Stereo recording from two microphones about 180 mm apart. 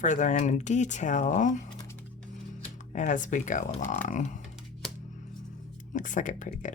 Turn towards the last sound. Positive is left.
turn(degrees=45)  # may be behind; listen again after turning